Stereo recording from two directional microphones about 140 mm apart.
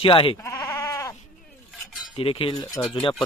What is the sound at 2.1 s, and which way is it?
Speech, 40° left (ahead or behind).